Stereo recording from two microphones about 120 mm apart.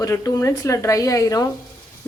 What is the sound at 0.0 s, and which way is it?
Speech, 30° left (ahead or behind).